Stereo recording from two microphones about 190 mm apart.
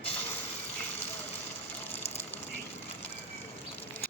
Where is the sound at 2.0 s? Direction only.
35° left (ahead or behind).